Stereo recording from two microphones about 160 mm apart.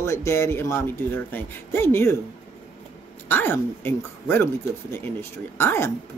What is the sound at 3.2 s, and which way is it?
Speech, 15° left (ahead or behind).